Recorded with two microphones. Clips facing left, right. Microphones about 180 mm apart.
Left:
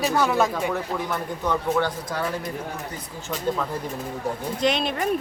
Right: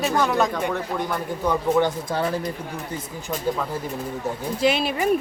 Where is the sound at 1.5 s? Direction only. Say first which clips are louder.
Right 3 dB; 20° right (ahead or behind).